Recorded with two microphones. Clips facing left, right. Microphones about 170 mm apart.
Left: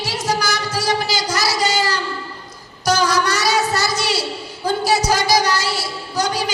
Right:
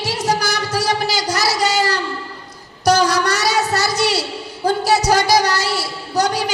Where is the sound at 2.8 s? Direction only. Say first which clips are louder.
Right 3 dB; 65° right (ahead or behind).